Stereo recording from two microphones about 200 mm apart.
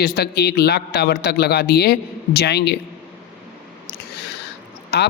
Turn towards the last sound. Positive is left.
turn(degrees=55)  # may be behind; listen again after turning